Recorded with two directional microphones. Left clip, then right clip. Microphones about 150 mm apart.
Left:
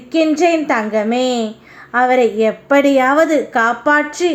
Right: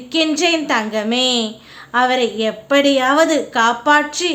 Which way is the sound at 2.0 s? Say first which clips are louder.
Left 3 dB; 25° left (ahead or behind).